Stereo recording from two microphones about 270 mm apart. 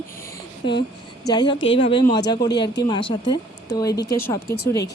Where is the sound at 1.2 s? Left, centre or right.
Centre.